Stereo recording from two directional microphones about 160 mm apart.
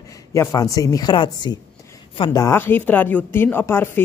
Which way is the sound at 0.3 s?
20° left (ahead or behind).